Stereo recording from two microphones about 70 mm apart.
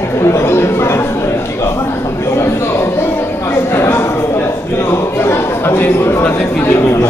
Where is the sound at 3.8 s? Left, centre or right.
Left.